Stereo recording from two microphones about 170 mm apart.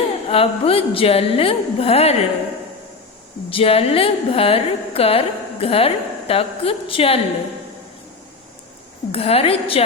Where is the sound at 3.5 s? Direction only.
35° left (ahead or behind).